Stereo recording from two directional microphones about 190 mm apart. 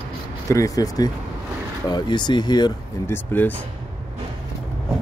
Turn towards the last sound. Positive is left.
turn(degrees=10)  # may be behind; listen again after turning